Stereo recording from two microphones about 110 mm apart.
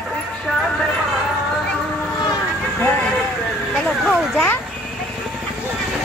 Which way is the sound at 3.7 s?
5° left (ahead or behind).